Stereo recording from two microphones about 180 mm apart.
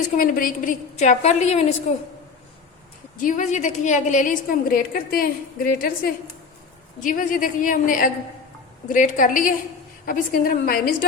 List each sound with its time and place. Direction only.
0.2 s a woman's voice: 50° left (ahead or behind)
3.2 s a woman's voice: 45° left (ahead or behind)
7.0 s a woman's voice: 50° left (ahead or behind)